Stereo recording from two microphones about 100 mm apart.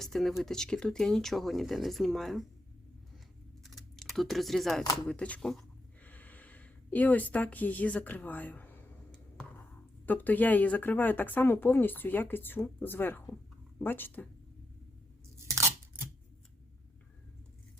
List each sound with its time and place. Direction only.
0.0 s speech: centre (ahead or behind)
3.6 s typing: centre (ahead or behind)
5.0 s speech: 10° left (ahead or behind)
10.1 s speech: 15° left (ahead or behind)
15.4 s scissors: 30° right (ahead or behind)